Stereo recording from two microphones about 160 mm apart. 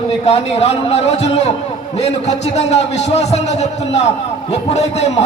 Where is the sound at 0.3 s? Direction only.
40° left (ahead or behind).